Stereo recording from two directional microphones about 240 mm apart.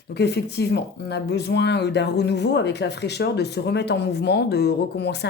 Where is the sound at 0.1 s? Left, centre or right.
Left.